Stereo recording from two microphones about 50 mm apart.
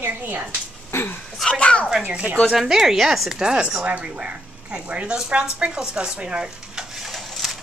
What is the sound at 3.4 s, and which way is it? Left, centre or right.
Speech, centre.